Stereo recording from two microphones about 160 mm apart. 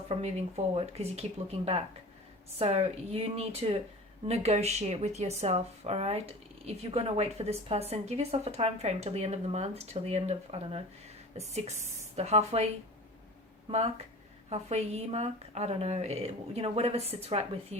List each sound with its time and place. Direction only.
0.1 s speech: 40° right (ahead or behind)